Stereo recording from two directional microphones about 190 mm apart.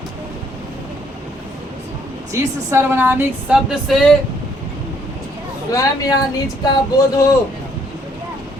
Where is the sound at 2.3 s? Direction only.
10° right (ahead or behind).